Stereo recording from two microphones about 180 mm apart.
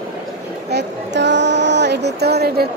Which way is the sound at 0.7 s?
75° right (ahead or behind).